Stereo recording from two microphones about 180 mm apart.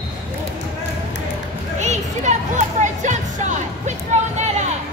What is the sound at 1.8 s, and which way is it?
Music, 40° right (ahead or behind).